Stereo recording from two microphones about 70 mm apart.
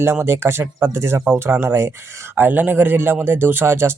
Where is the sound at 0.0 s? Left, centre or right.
Right.